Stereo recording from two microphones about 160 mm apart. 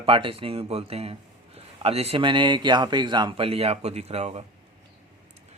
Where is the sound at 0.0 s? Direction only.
35° right (ahead or behind).